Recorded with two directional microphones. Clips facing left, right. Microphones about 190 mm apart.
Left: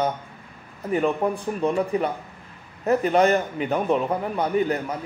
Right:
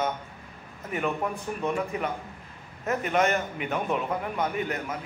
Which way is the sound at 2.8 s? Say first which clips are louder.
Left 6 dB; 35° left (ahead or behind).